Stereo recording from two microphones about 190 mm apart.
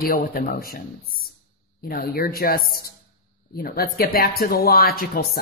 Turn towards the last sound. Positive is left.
turn(degrees=50)  # may be behind; listen again after turning